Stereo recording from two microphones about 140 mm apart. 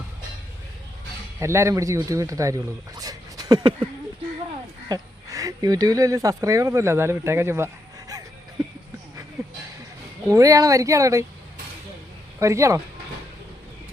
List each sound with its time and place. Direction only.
1.4 s speech: 20° right (ahead or behind)
4.9 s speech: 25° right (ahead or behind)
10.2 s speech: 25° right (ahead or behind)
12.4 s speech: 20° right (ahead or behind)